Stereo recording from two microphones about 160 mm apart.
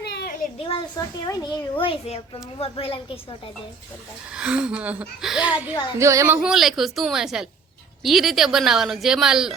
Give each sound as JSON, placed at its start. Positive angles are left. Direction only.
{"t": 0.0, "sound": "a sound", "side_deg": 90}
{"t": 0.6, "sound": "a child's voice", "side_deg": 30}
{"t": 1.8, "sound": "a woman's voice", "side_deg": 35}
{"t": 4.3, "sound": "speech", "side_deg": -5}
{"t": 6.0, "sound": "speech", "side_deg": -20}